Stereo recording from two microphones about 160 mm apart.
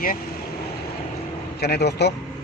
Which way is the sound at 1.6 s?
85° left.